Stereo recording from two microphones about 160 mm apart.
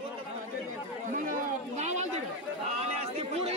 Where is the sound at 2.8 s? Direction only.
40° right (ahead or behind).